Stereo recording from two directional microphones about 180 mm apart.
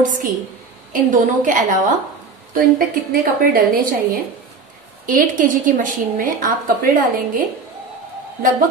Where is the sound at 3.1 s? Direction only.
55° right (ahead or behind).